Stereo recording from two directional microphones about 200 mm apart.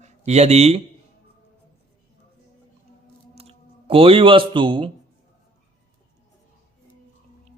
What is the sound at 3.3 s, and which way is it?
Speech, 30° right (ahead or behind).